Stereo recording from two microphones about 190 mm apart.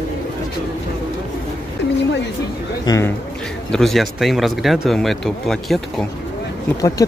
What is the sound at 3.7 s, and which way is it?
Speech, centre (ahead or behind).